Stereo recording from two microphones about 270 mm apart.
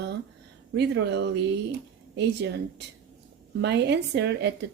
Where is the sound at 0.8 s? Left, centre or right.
Right.